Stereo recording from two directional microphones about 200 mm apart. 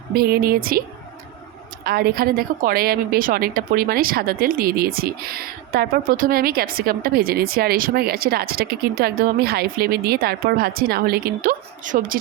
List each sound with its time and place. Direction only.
0.1 s a woman's voice: 50° right (ahead or behind)
1.8 s a woman's voice: 50° right (ahead or behind)